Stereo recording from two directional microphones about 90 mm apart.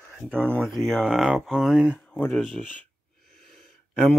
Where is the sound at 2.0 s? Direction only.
10° left (ahead or behind).